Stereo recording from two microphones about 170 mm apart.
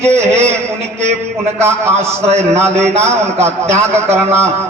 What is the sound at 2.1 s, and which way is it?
A man's voice, 40° right (ahead or behind).